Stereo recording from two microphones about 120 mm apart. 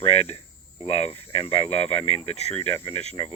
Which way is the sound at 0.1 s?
60° left (ahead or behind).